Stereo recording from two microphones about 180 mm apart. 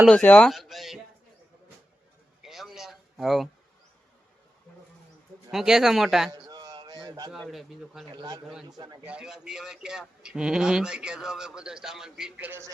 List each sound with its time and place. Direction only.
0.1 s speech: 5° left (ahead or behind)
2.4 s a sound: centre (ahead or behind)
5.5 s speech: centre (ahead or behind)
6.3 s a sound: 20° right (ahead or behind)
7.3 s speech: centre (ahead or behind)
8.1 s speech: 25° right (ahead or behind)
9.0 s speech: 5° right (ahead or behind)